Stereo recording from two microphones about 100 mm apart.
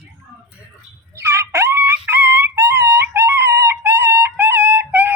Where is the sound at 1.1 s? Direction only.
25° right (ahead or behind).